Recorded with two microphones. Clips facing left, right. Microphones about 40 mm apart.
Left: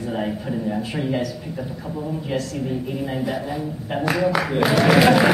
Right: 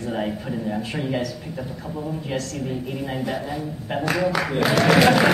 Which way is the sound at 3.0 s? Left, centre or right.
Centre.